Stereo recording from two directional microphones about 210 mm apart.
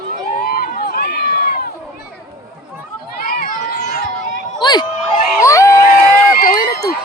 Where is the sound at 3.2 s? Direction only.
40° left (ahead or behind).